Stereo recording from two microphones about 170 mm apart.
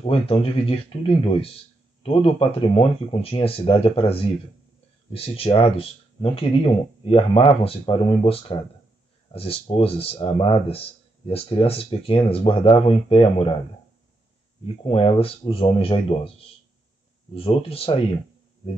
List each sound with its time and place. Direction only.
0.0 s speech: 35° left (ahead or behind)
14.8 s speech: 35° left (ahead or behind)